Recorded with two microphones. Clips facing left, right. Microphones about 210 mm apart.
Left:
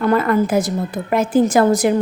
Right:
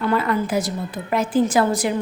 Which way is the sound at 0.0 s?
45° left (ahead or behind).